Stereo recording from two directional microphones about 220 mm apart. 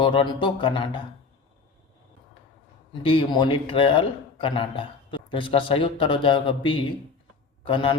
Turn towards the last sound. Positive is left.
turn(degrees=25)  # may be behind; listen again after turning